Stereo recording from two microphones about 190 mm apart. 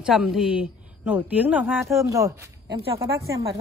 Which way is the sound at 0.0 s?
Centre (ahead or behind).